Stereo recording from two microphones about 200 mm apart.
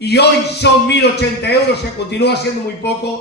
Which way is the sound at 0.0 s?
55° left (ahead or behind).